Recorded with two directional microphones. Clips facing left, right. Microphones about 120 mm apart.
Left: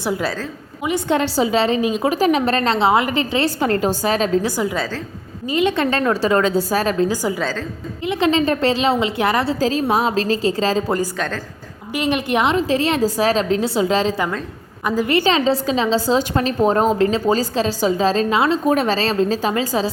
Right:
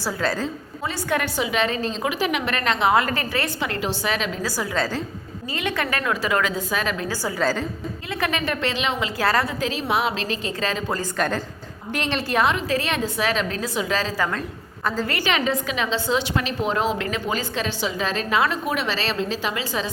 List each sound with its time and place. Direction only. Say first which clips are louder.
0.0 s a woman's voice: left 2 dB; 20° left (ahead or behind)
3.6 s a woman's voice: left 8 dB; 40° left (ahead or behind)
4.4 s a woman's voice: left 4 dB; 20° left (ahead or behind)
7.1 s a woman's voice: left 2 dB; 15° left (ahead or behind)
9.5 s a woman's voice: left 6 dB; 35° left (ahead or behind)
11.9 s a woman's voice: left 6 dB; 10° left (ahead or behind)
12.3 s a woman's voice: left 3 dB; 20° left (ahead or behind)
18.7 s a woman's voice: left 7 dB; 40° left (ahead or behind)